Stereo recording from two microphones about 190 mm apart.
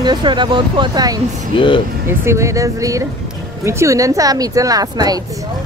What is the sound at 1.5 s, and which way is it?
Speech, 25° left (ahead or behind).